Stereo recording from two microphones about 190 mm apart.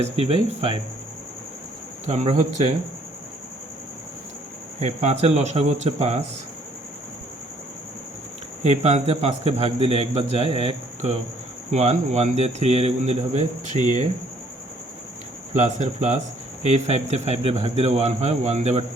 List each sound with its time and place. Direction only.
0.0 s speech: 30° right (ahead or behind)
2.0 s a man's voice: 35° right (ahead or behind)
4.8 s a man's voice: 40° right (ahead or behind)
8.6 s a man's voice: 35° right (ahead or behind)
15.5 s a man's voice: 35° right (ahead or behind)